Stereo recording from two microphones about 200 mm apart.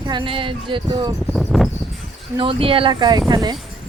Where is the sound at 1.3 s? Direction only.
Centre (ahead or behind).